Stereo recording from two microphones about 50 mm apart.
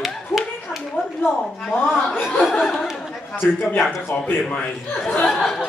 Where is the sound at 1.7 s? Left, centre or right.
Left.